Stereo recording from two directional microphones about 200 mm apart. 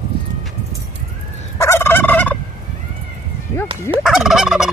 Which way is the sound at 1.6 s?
10° left (ahead or behind).